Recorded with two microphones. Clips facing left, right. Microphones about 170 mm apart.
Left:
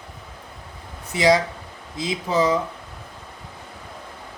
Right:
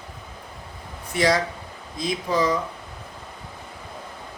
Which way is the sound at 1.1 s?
20° left (ahead or behind).